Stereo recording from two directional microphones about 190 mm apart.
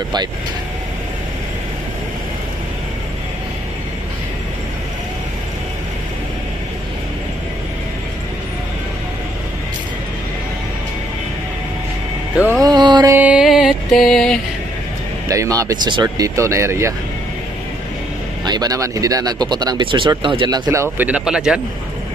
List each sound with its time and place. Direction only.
12.4 s music: 15° right (ahead or behind)
13.1 s mantra: 5° right (ahead or behind)
15.2 s speech: 15° right (ahead or behind)
18.4 s speech: 20° right (ahead or behind)
20.6 s speech: 10° right (ahead or behind)